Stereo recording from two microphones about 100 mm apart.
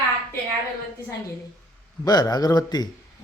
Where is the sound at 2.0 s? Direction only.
45° left (ahead or behind).